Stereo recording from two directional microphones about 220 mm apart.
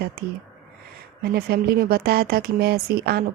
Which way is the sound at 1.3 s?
45° right (ahead or behind).